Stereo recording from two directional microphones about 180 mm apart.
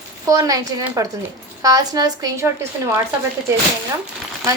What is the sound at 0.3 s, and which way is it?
Speech, 20° right (ahead or behind).